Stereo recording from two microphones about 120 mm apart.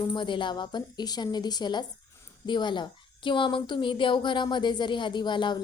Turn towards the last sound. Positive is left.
turn(degrees=40)  # may be behind; listen again after turning